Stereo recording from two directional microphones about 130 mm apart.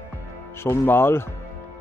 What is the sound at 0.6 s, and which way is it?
Speech, 20° left (ahead or behind).